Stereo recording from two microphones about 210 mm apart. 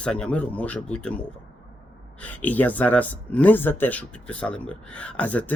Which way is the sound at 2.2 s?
10° left (ahead or behind).